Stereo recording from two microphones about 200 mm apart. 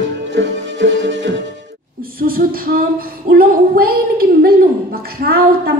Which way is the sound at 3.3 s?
50° right (ahead or behind).